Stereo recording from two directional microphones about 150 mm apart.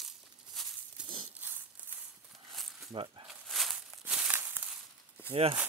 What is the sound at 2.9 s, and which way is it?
Speech, 35° right (ahead or behind).